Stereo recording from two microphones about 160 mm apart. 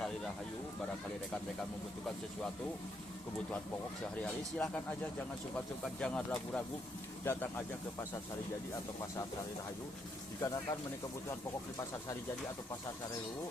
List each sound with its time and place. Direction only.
4.2 s speech: 10° left (ahead or behind)
10.4 s speech: 20° left (ahead or behind)